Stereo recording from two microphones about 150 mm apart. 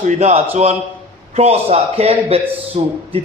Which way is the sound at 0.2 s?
50° right (ahead or behind).